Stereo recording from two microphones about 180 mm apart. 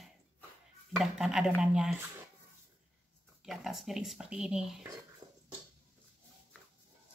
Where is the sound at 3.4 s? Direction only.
Centre (ahead or behind).